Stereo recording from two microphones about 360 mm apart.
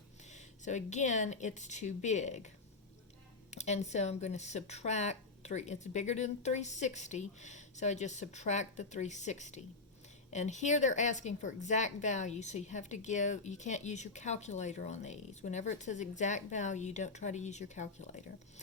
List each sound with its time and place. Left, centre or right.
0.6 s a woman's voice: centre
3.5 s a woman's voice: centre